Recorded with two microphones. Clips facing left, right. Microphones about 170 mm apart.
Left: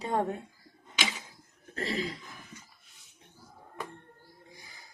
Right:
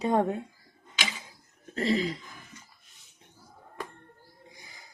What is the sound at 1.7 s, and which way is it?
Speech, 20° right (ahead or behind).